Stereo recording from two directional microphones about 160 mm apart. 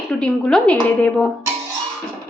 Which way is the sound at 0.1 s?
5° left (ahead or behind).